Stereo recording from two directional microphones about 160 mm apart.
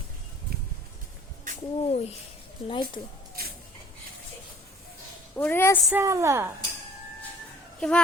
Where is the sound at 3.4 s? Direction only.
70° right (ahead or behind).